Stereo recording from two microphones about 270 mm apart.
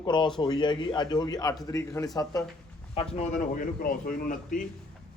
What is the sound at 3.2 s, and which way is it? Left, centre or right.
A man's voice, left.